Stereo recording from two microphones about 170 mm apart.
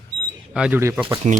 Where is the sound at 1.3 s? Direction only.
45° right (ahead or behind).